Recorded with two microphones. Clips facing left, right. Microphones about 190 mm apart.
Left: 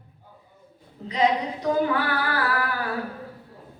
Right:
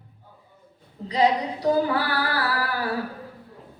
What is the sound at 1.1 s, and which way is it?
Female singing, 35° right (ahead or behind).